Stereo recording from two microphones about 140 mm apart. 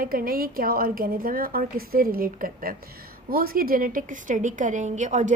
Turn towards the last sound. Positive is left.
turn(degrees=-60)  # may be behind; listen again after turning